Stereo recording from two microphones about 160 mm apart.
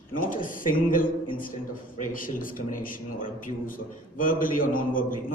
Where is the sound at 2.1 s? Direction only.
60° left (ahead or behind).